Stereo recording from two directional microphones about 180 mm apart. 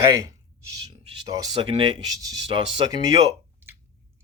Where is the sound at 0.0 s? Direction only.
20° right (ahead or behind).